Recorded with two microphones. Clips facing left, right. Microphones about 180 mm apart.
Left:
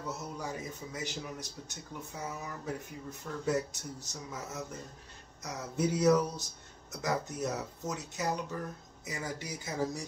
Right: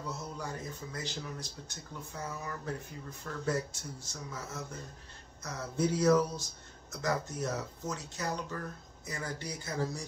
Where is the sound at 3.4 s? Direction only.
15° left (ahead or behind).